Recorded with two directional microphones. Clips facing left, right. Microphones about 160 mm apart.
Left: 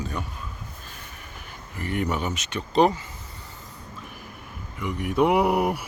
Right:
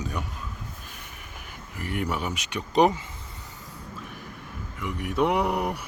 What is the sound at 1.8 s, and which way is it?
Speech, 5° right (ahead or behind).